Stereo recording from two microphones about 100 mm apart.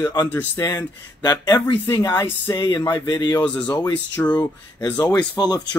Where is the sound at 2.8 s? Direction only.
35° left (ahead or behind).